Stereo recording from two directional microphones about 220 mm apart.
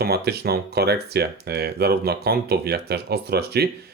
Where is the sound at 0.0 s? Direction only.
45° right (ahead or behind).